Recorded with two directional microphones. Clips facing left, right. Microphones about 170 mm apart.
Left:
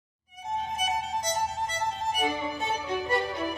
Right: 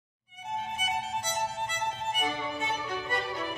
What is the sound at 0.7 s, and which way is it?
Violin, 40° left (ahead or behind).